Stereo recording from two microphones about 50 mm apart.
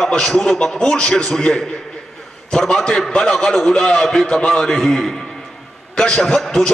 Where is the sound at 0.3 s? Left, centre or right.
Centre.